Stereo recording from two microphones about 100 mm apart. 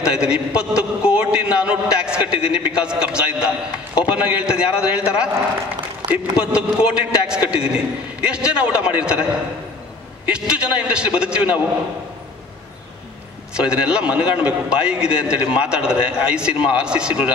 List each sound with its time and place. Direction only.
0.0 s a man's voice: 10° right (ahead or behind)
6.0 s a sound: 40° right (ahead or behind)
6.5 s a man's voice: 10° right (ahead or behind)
10.2 s a man's voice: 10° right (ahead or behind)
13.6 s a man's voice: 10° right (ahead or behind)